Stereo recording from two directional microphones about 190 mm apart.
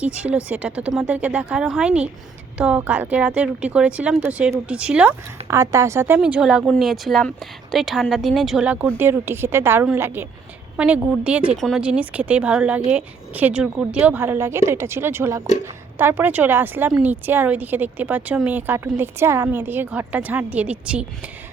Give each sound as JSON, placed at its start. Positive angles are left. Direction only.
{"t": 0.0, "sound": "speech", "side_deg": -5}
{"t": 5.5, "sound": "speech", "side_deg": -15}
{"t": 6.1, "sound": "speech", "side_deg": -5}